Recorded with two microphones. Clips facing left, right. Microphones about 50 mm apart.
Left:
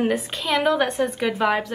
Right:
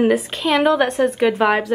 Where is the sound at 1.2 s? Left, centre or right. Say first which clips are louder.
Right 5 dB; centre.